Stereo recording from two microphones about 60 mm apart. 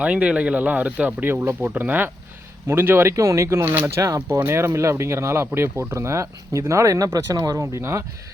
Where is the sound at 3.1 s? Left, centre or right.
Right.